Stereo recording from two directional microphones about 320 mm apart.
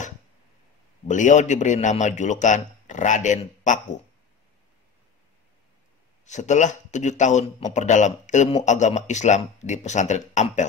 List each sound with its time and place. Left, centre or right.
1.0 s a man's voice: left
6.2 s a man's voice: left